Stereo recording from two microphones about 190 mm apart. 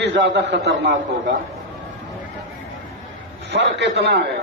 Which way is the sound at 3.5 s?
65° right (ahead or behind).